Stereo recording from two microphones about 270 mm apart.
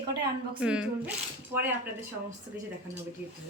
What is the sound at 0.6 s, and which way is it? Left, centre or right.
A woman's voice, centre.